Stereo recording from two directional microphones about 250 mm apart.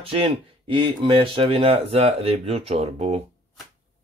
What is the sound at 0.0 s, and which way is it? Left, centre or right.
Speech, right.